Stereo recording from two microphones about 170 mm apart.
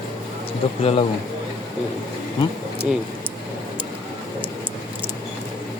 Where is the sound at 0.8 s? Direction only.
35° left (ahead or behind).